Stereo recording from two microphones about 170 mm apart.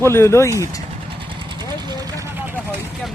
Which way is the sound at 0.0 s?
15° left (ahead or behind).